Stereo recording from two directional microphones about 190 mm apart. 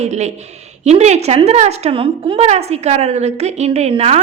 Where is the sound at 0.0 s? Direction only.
35° right (ahead or behind).